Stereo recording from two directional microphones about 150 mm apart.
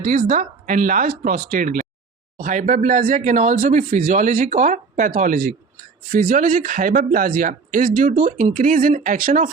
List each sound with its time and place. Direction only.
0.0 s speech: 65° right (ahead or behind)